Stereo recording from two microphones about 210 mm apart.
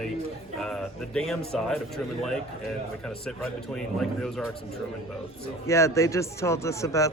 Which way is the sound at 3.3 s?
5° left (ahead or behind).